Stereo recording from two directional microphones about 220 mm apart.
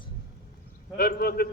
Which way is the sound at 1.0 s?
45° left (ahead or behind).